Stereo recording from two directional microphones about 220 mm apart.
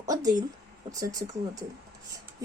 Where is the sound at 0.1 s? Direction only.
15° right (ahead or behind).